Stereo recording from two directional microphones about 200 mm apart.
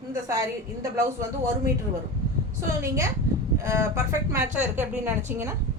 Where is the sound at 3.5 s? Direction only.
15° right (ahead or behind).